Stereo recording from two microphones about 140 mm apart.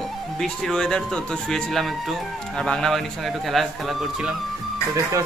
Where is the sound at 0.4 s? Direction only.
5° left (ahead or behind).